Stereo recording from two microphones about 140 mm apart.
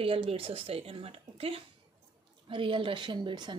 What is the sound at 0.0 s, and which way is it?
A woman's voice, 40° right (ahead or behind).